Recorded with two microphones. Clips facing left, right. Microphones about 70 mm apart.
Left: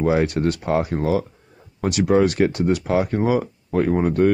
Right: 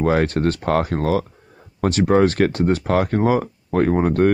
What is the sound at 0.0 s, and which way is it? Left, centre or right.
Speech, right.